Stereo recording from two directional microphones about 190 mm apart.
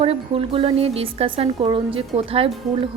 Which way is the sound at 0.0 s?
30° right (ahead or behind).